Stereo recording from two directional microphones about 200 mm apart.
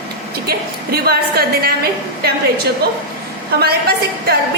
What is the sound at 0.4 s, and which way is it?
A woman's voice, 50° right (ahead or behind).